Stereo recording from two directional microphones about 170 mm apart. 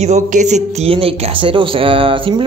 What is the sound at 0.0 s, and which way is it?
A man's voice, 45° right (ahead or behind).